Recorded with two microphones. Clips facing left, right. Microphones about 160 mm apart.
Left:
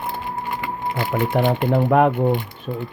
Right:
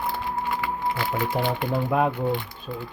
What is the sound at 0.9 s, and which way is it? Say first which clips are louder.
Speech: left 8 dB; 50° left (ahead or behind).